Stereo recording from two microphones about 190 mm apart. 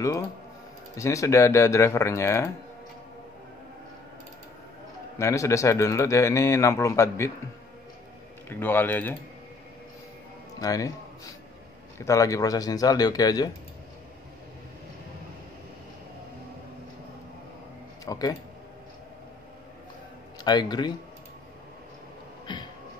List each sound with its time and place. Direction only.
0.9 s a man's voice: 15° left (ahead or behind)
5.2 s a man's voice: 15° left (ahead or behind)
8.5 s a man's voice: 10° left (ahead or behind)
10.6 s a man's voice: 20° left (ahead or behind)
12.0 s speech: 15° left (ahead or behind)
18.0 s speech: 20° left (ahead or behind)
20.4 s speech: 20° left (ahead or behind)
22.5 s a sound: 20° left (ahead or behind)